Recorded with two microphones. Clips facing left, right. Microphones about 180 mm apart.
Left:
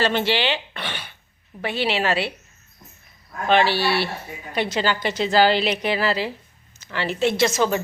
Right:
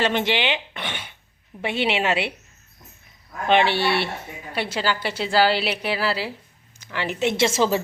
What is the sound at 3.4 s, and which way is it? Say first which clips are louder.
Speech: even; 20° right (ahead or behind).